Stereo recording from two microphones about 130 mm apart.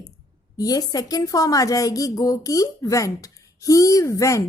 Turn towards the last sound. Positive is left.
turn(degrees=25)  # may be behind; listen again after turning